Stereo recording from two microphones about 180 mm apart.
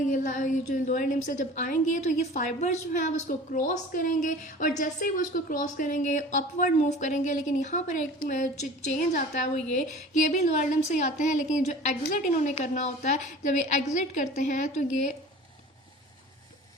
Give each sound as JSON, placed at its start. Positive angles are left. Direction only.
{"t": 0.1, "sound": "a woman's voice", "side_deg": 45}